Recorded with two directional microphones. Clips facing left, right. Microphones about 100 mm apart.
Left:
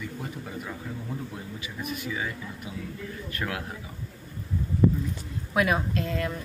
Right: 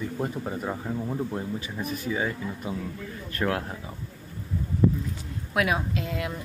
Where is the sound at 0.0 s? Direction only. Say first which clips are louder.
Right 6 dB; 35° right (ahead or behind).